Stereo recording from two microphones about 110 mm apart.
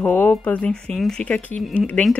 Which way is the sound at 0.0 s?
15° left (ahead or behind).